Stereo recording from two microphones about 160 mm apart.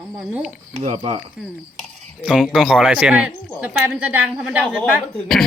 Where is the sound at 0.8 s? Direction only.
45° right (ahead or behind).